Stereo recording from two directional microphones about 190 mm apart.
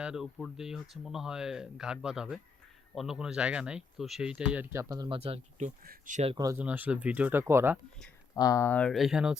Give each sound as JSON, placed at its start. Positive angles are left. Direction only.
{"t": 0.0, "sound": "speech", "side_deg": -5}
{"t": 6.3, "sound": "speech", "side_deg": -20}
{"t": 6.6, "sound": "speech", "side_deg": -10}
{"t": 8.4, "sound": "speech", "side_deg": 15}